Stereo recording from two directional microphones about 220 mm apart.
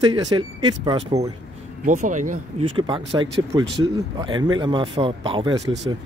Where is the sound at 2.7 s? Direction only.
20° right (ahead or behind).